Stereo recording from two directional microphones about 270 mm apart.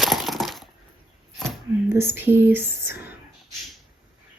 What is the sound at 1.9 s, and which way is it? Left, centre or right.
Speech, centre.